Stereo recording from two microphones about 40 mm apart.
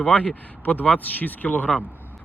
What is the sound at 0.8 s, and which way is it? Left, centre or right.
Speech, left.